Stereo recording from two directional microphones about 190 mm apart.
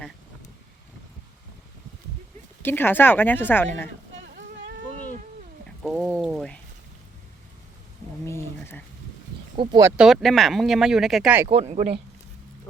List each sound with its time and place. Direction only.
2.6 s a woman's voice: 10° left (ahead or behind)
5.8 s a sound: centre (ahead or behind)
8.2 s a sound: 15° left (ahead or behind)
9.6 s speech: 20° right (ahead or behind)
10.0 s speech: centre (ahead or behind)
11.4 s speech: 30° right (ahead or behind)